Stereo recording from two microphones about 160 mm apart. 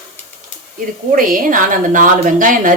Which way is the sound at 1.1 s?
60° right (ahead or behind).